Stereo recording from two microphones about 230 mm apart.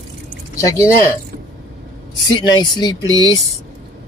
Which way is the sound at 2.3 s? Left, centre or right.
Centre.